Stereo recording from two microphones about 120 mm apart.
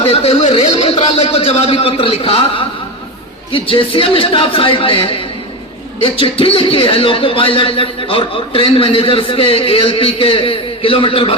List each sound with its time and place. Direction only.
0.0 s speech: 55° left (ahead or behind)